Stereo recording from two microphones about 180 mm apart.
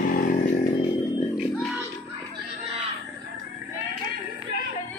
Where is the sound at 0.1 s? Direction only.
50° left (ahead or behind).